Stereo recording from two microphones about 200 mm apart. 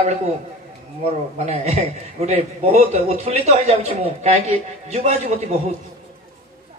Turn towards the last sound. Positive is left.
turn(degrees=-30)  # may be behind; listen again after turning